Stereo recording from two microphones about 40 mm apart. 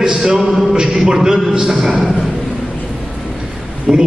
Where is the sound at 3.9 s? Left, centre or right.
Centre.